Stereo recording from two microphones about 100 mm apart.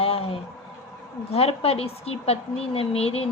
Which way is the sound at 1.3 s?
90° left.